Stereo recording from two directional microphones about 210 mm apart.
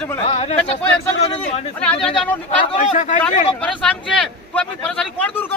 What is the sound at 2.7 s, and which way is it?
Speech, 35° left (ahead or behind).